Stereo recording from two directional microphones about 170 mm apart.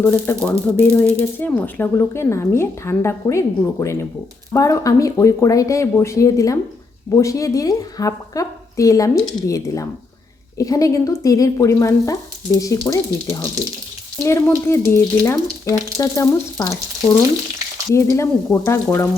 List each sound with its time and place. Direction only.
0.0 s a woman's voice: 15° left (ahead or behind)